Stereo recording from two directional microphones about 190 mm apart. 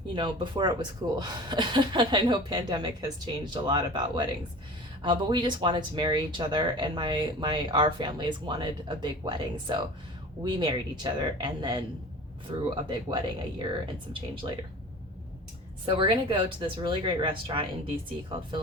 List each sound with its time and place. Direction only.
0.1 s speech: 25° right (ahead or behind)
15.9 s speech: 25° right (ahead or behind)